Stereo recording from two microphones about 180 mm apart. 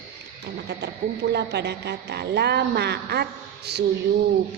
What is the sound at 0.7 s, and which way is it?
Speech, 65° right (ahead or behind).